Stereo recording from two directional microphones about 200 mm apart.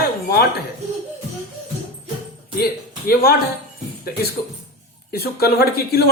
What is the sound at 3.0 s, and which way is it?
Speech, 50° left (ahead or behind).